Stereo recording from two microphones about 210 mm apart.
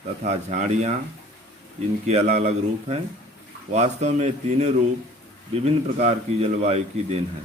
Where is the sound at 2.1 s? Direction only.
35° right (ahead or behind).